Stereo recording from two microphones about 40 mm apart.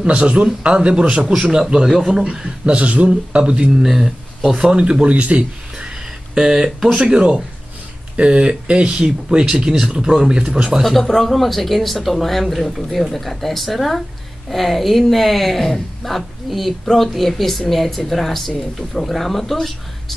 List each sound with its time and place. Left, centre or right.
0.0 s a man's voice: right; by 2.2 s centre
2.2 s speech: right
3.8 s a man's voice: centre
4.6 s speech: right
5.0 s speech: right
6.3 s a man's voice: centre
10.8 s speech: centre